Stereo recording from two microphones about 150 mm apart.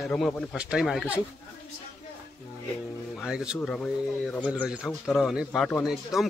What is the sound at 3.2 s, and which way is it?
Speech, 5° right (ahead or behind).